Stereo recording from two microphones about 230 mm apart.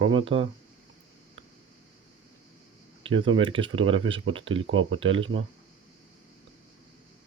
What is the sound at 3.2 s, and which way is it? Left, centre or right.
Speech, right.